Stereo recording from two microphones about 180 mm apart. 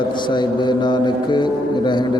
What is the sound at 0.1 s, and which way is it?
Mantra, 25° left (ahead or behind).